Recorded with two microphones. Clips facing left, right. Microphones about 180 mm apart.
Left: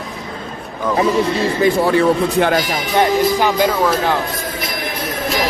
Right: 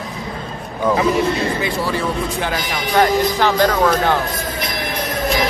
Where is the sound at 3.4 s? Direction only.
10° left (ahead or behind).